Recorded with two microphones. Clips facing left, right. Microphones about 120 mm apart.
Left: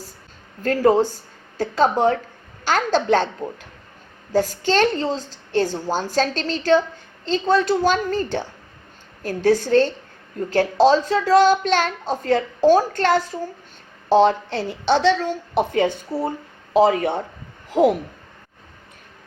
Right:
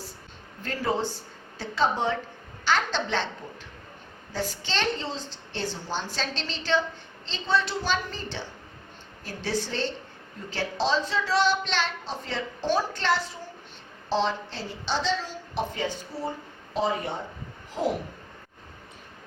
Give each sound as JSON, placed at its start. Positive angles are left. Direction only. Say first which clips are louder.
{"t": 0.6, "sound": "a child's voice", "louder": "left 11 dB", "side_deg": 45}
{"t": 4.3, "sound": "a child's voice", "louder": "left 12 dB", "side_deg": 45}
{"t": 16.7, "sound": "speech", "louder": "left 11 dB", "side_deg": 75}